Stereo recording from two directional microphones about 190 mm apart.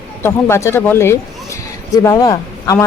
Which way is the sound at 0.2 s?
15° left (ahead or behind).